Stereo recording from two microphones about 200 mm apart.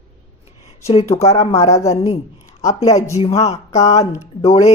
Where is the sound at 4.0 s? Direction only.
15° left (ahead or behind).